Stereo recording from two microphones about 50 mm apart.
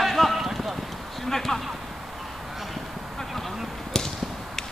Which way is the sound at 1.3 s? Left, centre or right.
Centre.